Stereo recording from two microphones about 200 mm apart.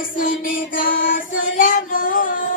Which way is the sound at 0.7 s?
45° left (ahead or behind).